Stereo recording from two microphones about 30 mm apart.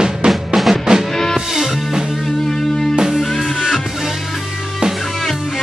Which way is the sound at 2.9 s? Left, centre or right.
Centre.